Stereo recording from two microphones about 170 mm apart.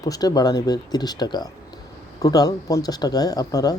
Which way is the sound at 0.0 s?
20° left (ahead or behind).